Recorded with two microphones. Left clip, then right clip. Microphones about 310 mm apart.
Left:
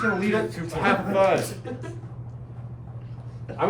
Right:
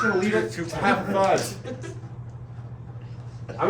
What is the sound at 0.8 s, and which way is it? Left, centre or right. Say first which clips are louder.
Speech: left 1 dB; centre.